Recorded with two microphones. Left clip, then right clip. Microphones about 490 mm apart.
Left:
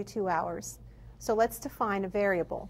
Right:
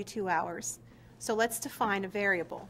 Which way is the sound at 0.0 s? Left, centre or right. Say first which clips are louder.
Left 1 dB; left.